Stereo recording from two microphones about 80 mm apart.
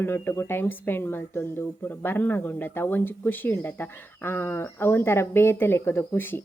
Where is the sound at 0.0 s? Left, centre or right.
Left.